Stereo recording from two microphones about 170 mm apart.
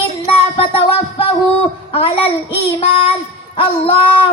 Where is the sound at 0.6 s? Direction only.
35° left (ahead or behind).